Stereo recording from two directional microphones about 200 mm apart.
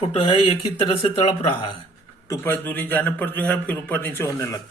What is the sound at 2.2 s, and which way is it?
A man's voice, 10° left (ahead or behind).